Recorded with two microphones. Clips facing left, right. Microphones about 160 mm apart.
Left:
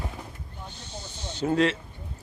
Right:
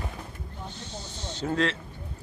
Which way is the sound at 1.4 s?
10° left (ahead or behind).